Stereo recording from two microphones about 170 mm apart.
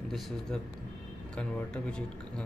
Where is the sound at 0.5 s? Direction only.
5° left (ahead or behind).